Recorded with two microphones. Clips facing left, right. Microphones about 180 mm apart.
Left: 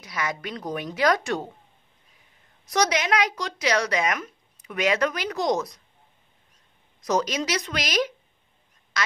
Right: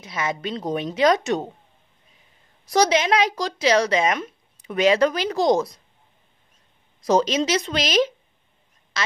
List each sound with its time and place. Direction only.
0.0 s speech: 25° right (ahead or behind)
2.7 s speech: 30° right (ahead or behind)
7.0 s speech: 30° right (ahead or behind)
9.0 s quack: 25° right (ahead or behind)